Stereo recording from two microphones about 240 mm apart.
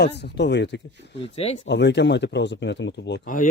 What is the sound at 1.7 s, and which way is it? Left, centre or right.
Speech, left.